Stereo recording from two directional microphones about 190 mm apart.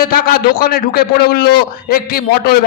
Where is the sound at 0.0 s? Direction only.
50° left (ahead or behind).